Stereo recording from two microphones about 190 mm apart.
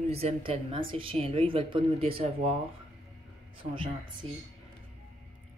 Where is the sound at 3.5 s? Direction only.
25° right (ahead or behind).